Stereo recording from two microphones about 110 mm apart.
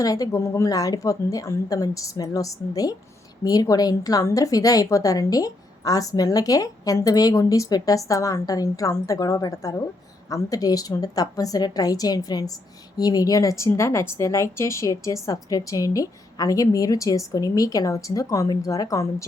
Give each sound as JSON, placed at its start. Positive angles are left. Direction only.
{"t": 0.0, "sound": "a woman's voice", "side_deg": 35}